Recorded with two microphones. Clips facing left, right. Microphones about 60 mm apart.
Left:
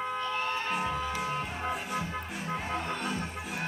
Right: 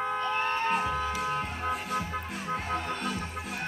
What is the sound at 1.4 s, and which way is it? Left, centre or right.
Music, centre.